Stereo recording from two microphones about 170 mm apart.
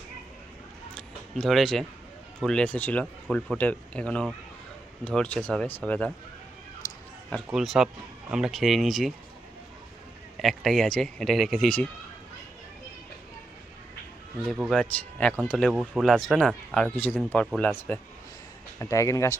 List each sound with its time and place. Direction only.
0.9 s a sound: 5° left (ahead or behind)
2.4 s speech: 5° left (ahead or behind)
6.8 s a sound: 20° left (ahead or behind)
7.5 s speech: centre (ahead or behind)
10.4 s speech: centre (ahead or behind)
14.4 s speech: centre (ahead or behind); by 19.4 s 20° left (ahead or behind)